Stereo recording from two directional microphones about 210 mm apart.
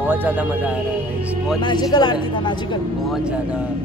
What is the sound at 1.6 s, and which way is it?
Speech, 20° left (ahead or behind).